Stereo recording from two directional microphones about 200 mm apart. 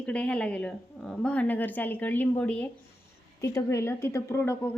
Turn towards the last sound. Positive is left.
turn(degrees=10)  # may be behind; listen again after turning